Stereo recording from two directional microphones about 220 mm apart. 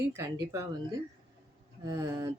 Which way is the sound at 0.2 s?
15° right (ahead or behind).